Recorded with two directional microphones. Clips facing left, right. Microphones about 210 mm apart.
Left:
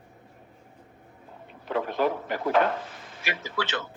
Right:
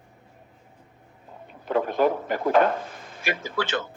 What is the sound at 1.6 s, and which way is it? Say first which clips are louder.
Speech: right 4 dB; 45° right (ahead or behind).